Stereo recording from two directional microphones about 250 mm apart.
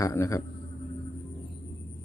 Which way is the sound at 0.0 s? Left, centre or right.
Centre.